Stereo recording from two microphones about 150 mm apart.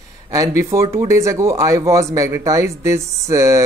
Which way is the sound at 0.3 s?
20° right (ahead or behind).